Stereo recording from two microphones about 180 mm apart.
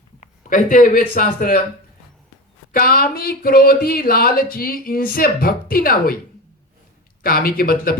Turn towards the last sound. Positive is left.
turn(degrees=55)  # may be behind; listen again after turning